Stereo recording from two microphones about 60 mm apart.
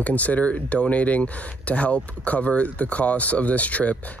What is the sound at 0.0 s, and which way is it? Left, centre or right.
Speech, left.